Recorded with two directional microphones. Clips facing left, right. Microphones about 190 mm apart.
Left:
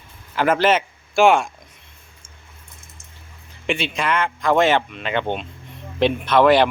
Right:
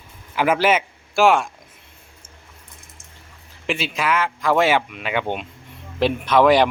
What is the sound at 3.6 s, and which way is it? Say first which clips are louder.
Speech: even; centre (ahead or behind).